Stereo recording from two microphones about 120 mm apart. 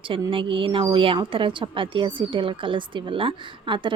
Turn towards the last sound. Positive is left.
turn(degrees=-40)  # may be behind; listen again after turning